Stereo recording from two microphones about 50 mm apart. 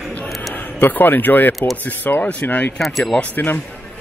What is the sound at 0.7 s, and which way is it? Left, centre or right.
Speech, left.